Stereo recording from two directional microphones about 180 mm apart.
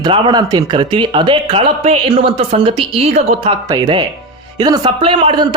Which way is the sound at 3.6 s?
25° right (ahead or behind).